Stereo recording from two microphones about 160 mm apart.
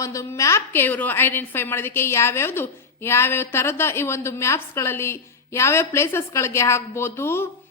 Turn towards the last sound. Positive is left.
turn(degrees=15)  # may be behind; listen again after turning